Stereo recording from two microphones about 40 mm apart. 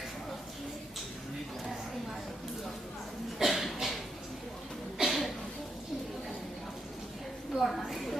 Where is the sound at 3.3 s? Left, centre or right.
Centre.